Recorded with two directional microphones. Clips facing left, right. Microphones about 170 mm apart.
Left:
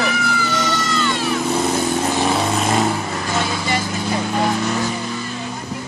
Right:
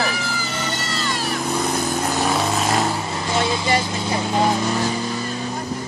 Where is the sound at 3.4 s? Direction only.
20° right (ahead or behind).